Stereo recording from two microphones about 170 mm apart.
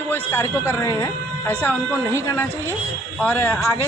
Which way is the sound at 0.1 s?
15° left (ahead or behind).